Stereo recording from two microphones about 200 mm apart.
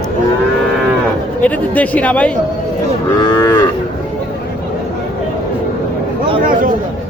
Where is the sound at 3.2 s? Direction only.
20° left (ahead or behind).